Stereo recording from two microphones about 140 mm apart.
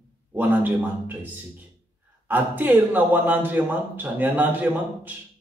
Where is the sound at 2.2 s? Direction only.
15° right (ahead or behind).